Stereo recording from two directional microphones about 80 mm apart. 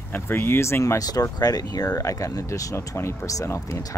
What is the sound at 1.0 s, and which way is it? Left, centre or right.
Speech, left.